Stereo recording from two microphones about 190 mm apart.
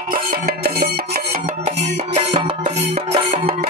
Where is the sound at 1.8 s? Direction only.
30° right (ahead or behind).